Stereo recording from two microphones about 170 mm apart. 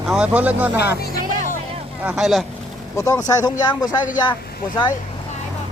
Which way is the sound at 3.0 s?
15° left (ahead or behind).